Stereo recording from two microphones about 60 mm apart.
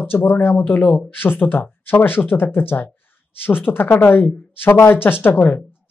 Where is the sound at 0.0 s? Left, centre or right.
Left.